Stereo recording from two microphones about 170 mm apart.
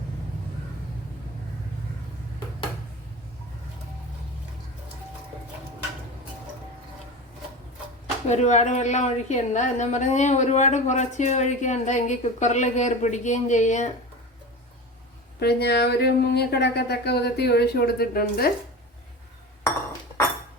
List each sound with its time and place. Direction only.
8.3 s a woman's voice: 45° left (ahead or behind)
15.4 s a woman's voice: 70° left (ahead or behind)